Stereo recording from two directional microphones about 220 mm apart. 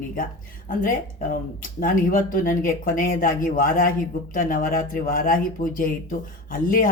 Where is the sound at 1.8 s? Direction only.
40° left (ahead or behind).